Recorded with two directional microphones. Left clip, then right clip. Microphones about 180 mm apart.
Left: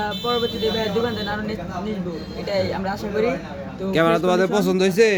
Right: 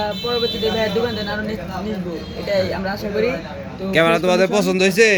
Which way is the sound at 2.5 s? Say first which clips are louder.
Right 3 dB; 5° left (ahead or behind).